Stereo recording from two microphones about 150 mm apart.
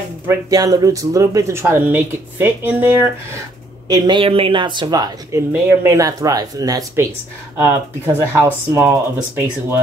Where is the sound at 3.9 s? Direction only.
30° right (ahead or behind).